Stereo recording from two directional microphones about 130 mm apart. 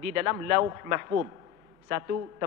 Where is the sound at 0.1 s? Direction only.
20° right (ahead or behind).